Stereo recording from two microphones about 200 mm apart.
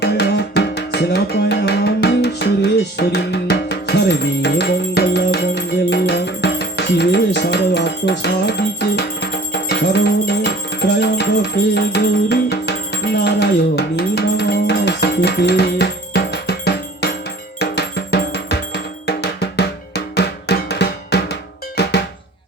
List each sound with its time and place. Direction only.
0.0 s music: 55° left (ahead or behind)
21.8 s cowbell: 55° left (ahead or behind)